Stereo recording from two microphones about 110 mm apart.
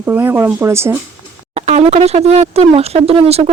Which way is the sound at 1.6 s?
85° right.